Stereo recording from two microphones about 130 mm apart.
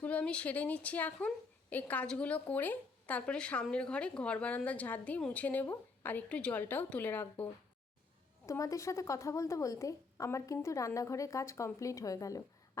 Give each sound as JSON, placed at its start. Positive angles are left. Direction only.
{"t": 0.0, "sound": "a woman's voice", "side_deg": 10}
{"t": 8.4, "sound": "a woman's voice", "side_deg": 25}